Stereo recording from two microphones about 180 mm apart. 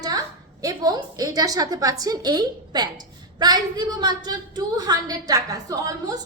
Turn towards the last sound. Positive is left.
turn(degrees=-20)  # may be behind; listen again after turning